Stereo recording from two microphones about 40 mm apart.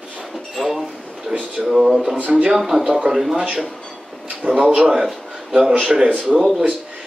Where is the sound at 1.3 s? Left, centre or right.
Right.